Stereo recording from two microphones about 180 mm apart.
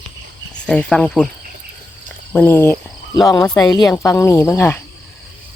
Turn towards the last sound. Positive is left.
turn(degrees=15)  # may be behind; listen again after turning